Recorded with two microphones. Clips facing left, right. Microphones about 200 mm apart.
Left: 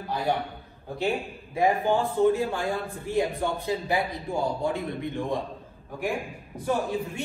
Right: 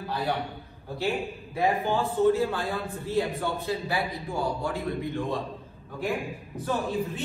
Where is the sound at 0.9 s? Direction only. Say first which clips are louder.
Left 1 dB; 20° left (ahead or behind).